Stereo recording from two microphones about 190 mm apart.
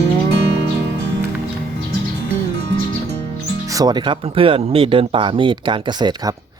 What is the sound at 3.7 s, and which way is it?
Speech, 20° right (ahead or behind).